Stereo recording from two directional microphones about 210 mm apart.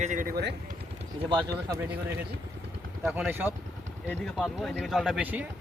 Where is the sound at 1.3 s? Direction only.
20° right (ahead or behind).